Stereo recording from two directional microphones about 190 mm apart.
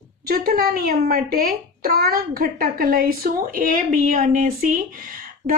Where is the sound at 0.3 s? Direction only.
50° right (ahead or behind).